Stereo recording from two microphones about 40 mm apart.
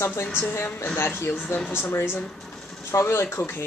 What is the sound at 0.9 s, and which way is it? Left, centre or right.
Speech, left.